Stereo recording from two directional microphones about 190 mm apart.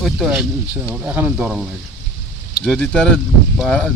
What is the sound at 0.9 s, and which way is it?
Speech, 10° right (ahead or behind).